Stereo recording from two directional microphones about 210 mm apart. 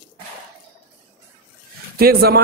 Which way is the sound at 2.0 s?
45° right (ahead or behind).